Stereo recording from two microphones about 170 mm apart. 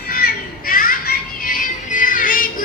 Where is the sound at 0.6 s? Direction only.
55° left (ahead or behind).